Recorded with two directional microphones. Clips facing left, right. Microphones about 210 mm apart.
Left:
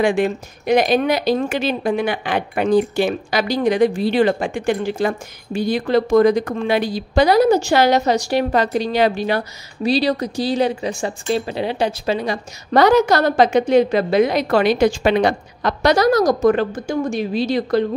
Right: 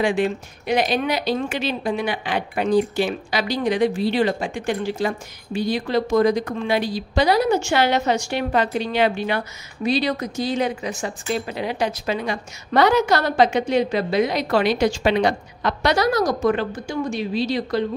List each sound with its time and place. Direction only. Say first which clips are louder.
0.0 s speech: left 3 dB; 50° left (ahead or behind)